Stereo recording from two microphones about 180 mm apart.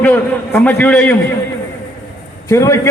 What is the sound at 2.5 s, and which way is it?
Speech, 15° left (ahead or behind).